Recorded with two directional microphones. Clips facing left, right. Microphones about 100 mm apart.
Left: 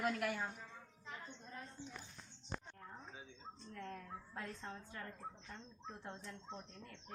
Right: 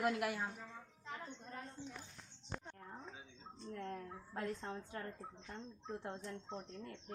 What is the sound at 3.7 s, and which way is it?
A woman's voice, 30° right (ahead or behind).